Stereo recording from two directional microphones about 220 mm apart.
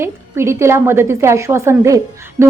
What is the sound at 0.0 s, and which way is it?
A woman's voice, 10° right (ahead or behind).